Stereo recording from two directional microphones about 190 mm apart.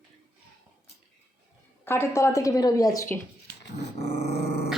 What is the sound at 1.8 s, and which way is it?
A woman's voice, 15° left (ahead or behind).